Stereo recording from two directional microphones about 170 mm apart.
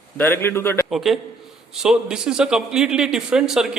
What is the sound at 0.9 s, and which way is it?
A man's voice, centre (ahead or behind).